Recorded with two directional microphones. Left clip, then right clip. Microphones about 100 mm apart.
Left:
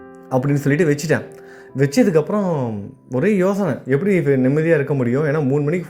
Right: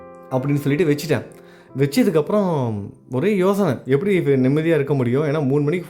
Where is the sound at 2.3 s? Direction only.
35° right (ahead or behind).